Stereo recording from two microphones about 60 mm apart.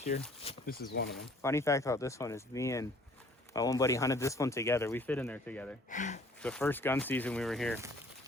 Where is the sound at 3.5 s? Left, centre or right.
Left.